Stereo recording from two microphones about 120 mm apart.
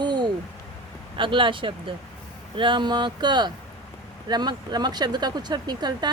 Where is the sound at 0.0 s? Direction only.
40° right (ahead or behind).